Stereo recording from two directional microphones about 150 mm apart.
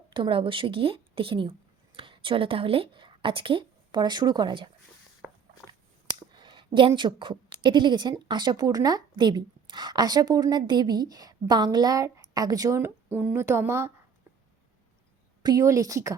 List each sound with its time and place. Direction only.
0.1 s a woman's voice: 35° right (ahead or behind)
5.2 s walk: centre (ahead or behind)
6.1 s a sound: 30° right (ahead or behind)
6.7 s a woman's voice: 35° right (ahead or behind); by 13.9 s 15° right (ahead or behind)
15.4 s a woman's voice: 20° right (ahead or behind)